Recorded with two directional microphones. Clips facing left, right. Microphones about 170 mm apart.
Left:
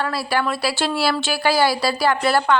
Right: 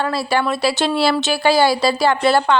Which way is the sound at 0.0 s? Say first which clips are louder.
Right 3 dB; 25° right (ahead or behind).